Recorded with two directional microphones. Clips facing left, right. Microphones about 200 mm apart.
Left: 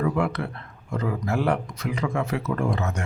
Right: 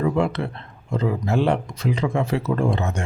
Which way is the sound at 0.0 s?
25° right (ahead or behind).